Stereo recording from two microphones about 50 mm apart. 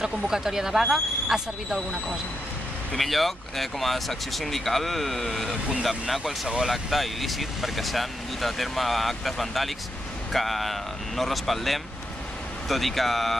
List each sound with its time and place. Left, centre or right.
0.0 s speech: centre